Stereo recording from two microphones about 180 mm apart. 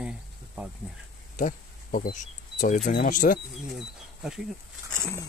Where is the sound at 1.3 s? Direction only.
50° left (ahead or behind).